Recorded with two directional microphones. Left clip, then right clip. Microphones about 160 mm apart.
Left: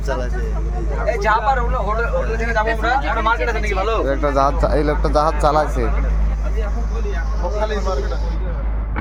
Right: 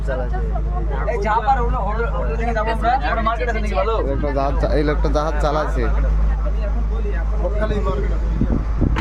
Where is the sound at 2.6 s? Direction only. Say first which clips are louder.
Left 1 dB; 35° left (ahead or behind).